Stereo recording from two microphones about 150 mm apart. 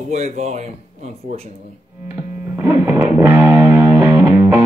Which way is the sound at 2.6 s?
15° right (ahead or behind).